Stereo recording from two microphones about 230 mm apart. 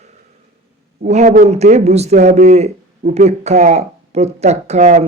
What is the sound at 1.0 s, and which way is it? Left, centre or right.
A man's voice, right.